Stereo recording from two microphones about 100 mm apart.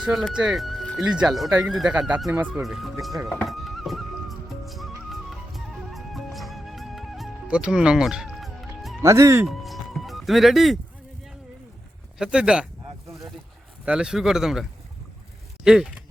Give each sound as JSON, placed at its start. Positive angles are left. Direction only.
{"t": 0.0, "sound": "speech", "side_deg": -5}
{"t": 2.6, "sound": "speech", "side_deg": 0}
{"t": 3.4, "sound": "music", "side_deg": 0}
{"t": 7.4, "sound": "music", "side_deg": -10}
{"t": 9.0, "sound": "speech", "side_deg": -30}
{"t": 9.5, "sound": "music", "side_deg": 0}
{"t": 12.2, "sound": "speech", "side_deg": -10}
{"t": 13.8, "sound": "speech", "side_deg": -10}